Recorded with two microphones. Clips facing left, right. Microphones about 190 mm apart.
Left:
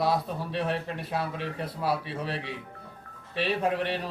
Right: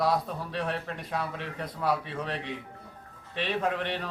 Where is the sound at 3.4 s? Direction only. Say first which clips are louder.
Left 2 dB; 35° left (ahead or behind).